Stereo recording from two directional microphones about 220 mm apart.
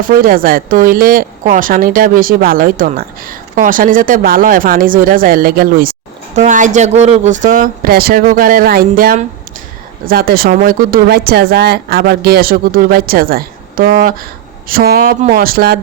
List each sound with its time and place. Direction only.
0.0 s a woman's voice: 40° right (ahead or behind)